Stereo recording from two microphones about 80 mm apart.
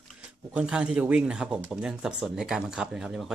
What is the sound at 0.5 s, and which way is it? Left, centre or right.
Speech, centre.